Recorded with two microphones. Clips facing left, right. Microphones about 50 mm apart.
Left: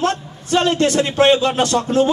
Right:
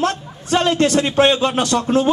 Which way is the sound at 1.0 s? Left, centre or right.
Right.